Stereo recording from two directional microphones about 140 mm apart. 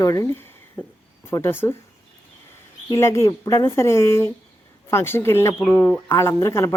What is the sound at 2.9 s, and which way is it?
Speech, 20° left (ahead or behind).